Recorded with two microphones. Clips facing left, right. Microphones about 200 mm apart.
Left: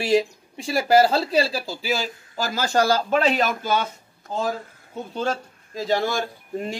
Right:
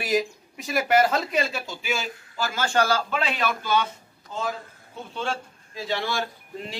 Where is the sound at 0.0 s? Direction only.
30° left (ahead or behind).